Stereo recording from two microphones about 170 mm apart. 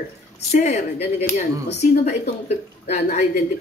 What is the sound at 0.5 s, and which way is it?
Speech, 40° left (ahead or behind).